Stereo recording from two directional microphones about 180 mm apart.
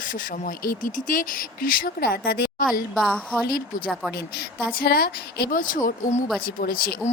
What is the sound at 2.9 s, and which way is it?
Speech, 5° left (ahead or behind).